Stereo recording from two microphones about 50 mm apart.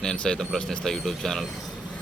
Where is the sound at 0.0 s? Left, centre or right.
Centre.